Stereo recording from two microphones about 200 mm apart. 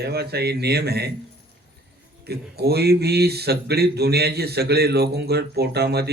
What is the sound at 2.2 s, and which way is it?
A man's voice, 55° right (ahead or behind).